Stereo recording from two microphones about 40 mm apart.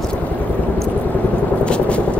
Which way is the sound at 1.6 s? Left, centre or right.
Left.